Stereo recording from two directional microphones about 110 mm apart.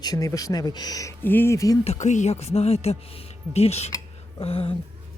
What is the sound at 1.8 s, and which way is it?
Speech, 85° left.